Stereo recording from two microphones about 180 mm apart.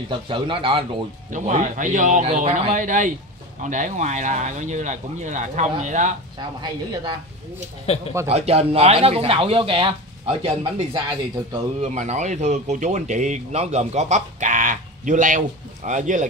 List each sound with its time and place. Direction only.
0.1 s speech: 30° right (ahead or behind)
1.3 s speech: 40° right (ahead or behind)
6.3 s speech: 25° right (ahead or behind)
7.9 s speech: 35° left (ahead or behind)
8.3 s speech: 35° right (ahead or behind)
11.9 s speech: 40° right (ahead or behind)